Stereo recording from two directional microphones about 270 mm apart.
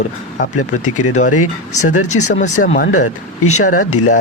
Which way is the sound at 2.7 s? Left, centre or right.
Left.